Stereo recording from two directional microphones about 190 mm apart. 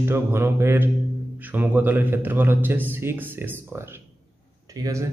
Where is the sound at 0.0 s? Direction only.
15° right (ahead or behind).